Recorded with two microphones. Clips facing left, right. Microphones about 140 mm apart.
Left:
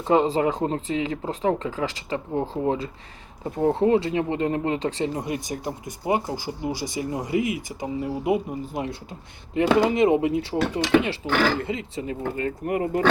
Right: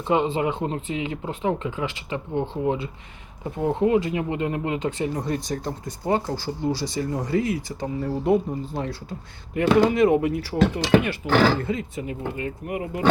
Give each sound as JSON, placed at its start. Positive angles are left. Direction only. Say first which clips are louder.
{"t": 0.1, "sound": "speech", "louder": "left 2 dB", "side_deg": 35}
{"t": 5.1, "sound": "speech", "louder": "right 2 dB", "side_deg": 15}
{"t": 11.3, "sound": "speech", "louder": "right 4 dB", "side_deg": -40}
{"t": 11.6, "sound": "speech", "louder": "right 1 dB", "side_deg": 25}
{"t": 12.0, "sound": "speech", "louder": "left 2 dB", "side_deg": 45}